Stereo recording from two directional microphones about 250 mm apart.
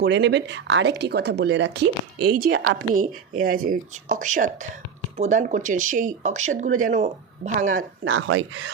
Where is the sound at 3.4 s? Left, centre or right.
Right.